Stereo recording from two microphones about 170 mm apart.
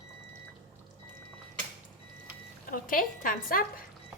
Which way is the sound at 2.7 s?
55° left (ahead or behind).